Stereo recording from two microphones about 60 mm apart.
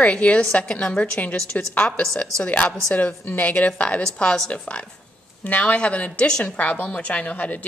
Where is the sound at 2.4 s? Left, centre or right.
Left.